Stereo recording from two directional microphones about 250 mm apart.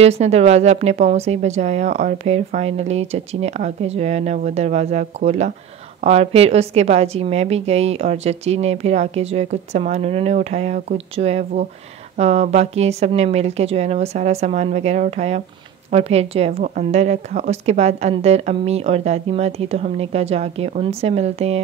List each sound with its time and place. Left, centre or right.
0.0 s a woman's voice: right